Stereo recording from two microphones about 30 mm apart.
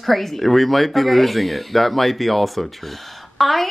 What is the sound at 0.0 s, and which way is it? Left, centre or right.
A woman's voice, centre.